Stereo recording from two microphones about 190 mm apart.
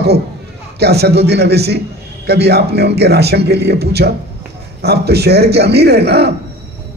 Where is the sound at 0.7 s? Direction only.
60° right (ahead or behind).